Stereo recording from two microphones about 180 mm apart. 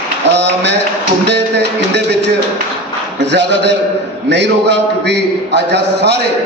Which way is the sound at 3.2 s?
75° right (ahead or behind).